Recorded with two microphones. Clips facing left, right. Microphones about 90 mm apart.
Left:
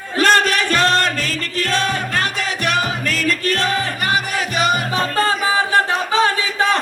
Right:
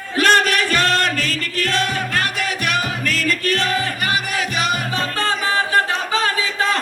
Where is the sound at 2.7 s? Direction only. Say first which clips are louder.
Left 1 dB; centre (ahead or behind).